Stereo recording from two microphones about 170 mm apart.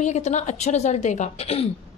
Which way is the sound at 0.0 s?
40° left (ahead or behind).